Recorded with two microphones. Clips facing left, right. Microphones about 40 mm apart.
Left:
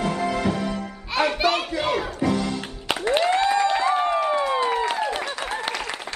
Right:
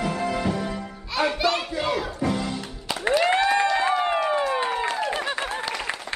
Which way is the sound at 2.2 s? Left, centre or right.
Centre.